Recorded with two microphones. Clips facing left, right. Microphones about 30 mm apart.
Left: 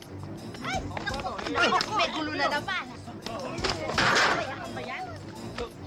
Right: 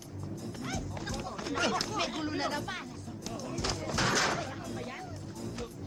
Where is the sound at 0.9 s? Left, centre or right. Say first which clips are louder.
Left 6 dB; left.